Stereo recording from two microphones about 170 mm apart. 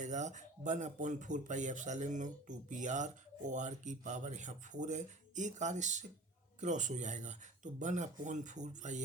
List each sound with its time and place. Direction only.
0.0 s speech: 45° right (ahead or behind)